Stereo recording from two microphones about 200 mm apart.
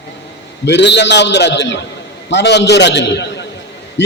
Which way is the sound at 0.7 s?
60° left (ahead or behind).